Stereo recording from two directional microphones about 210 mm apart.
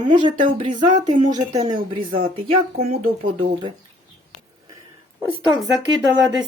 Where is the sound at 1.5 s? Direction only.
35° right (ahead or behind).